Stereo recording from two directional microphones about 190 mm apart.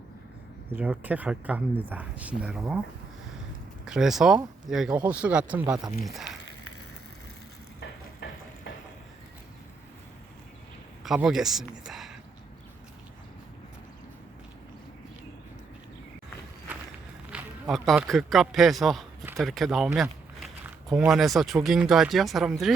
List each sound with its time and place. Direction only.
0.7 s speech: 10° right (ahead or behind)
3.8 s speech: 5° right (ahead or behind)
7.8 s a sound: 65° left (ahead or behind)
11.0 s speech: centre (ahead or behind)
17.3 s speech: centre (ahead or behind)